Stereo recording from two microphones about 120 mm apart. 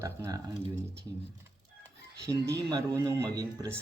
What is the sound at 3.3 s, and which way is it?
Speech, 35° right (ahead or behind).